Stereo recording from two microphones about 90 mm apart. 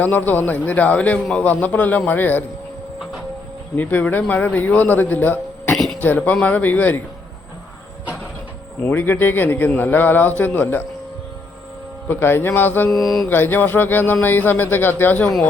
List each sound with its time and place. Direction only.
0.0 s a man's voice: 20° left (ahead or behind)
3.8 s a man's voice: 20° left (ahead or behind)
5.7 s a sound: 5° left (ahead or behind)
6.0 s a man's voice: 20° left (ahead or behind)
8.8 s a man's voice: 25° left (ahead or behind)
12.0 s a man's voice: 25° left (ahead or behind)
12.9 s mantra: centre (ahead or behind)
13.2 s a man's voice: 25° left (ahead or behind)